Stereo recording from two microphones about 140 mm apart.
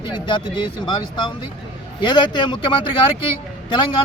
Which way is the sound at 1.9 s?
35° left (ahead or behind).